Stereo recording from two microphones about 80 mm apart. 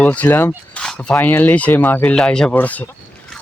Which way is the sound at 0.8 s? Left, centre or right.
Centre.